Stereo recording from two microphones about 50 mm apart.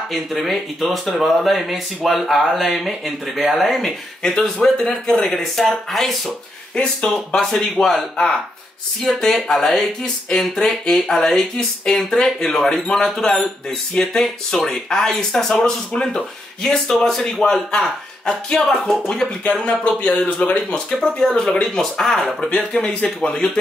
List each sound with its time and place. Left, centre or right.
0.1 s speech: centre
4.2 s speech: centre
6.7 s speech: left
7.5 s speech: centre
22.5 s speech: centre